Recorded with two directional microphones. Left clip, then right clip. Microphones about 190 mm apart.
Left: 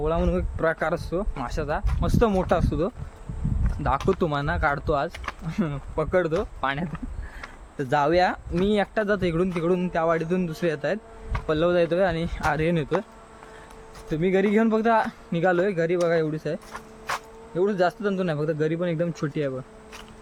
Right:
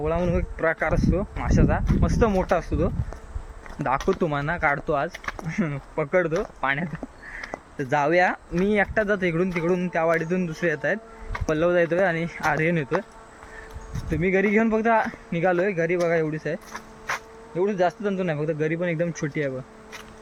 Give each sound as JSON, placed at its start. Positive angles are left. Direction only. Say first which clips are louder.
{"t": 0.0, "sound": "speech", "louder": "even", "side_deg": 15}
{"t": 3.9, "sound": "speech", "louder": "even", "side_deg": -5}
{"t": 4.2, "sound": "speech", "louder": "right 1 dB", "side_deg": 15}
{"t": 14.1, "sound": "speech", "louder": "right 1 dB", "side_deg": 20}
{"t": 17.6, "sound": "speech", "louder": "even", "side_deg": 20}